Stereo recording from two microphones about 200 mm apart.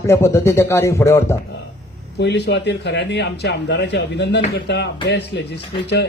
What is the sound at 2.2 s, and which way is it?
Speech, 60° left (ahead or behind).